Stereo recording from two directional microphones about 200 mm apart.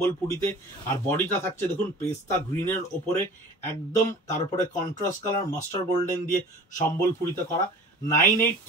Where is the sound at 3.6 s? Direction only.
40° left (ahead or behind).